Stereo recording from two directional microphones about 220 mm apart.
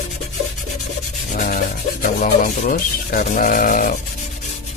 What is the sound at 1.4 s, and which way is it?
Rub, 40° left (ahead or behind).